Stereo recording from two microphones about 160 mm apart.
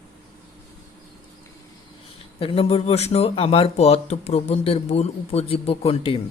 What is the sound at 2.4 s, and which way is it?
Speech, 35° left (ahead or behind).